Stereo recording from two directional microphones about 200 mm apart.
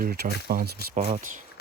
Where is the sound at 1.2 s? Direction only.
40° right (ahead or behind).